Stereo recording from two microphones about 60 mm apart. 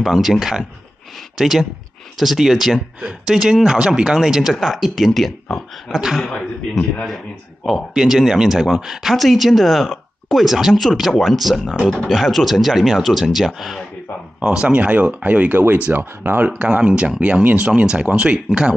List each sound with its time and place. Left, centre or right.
0.0 s speech: centre
6.1 s speech: centre
7.6 s speech: centre
14.4 s speech: centre; by 16.4 s right
16.4 s speech: right